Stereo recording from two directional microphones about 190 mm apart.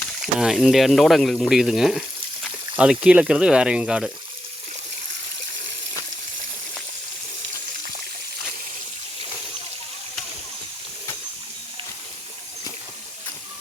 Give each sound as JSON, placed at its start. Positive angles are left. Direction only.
{"t": 0.3, "sound": "speech", "side_deg": -5}